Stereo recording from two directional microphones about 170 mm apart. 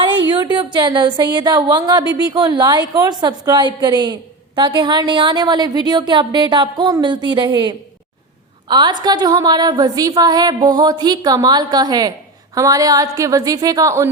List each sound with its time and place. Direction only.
0.3 s speech: 25° right (ahead or behind)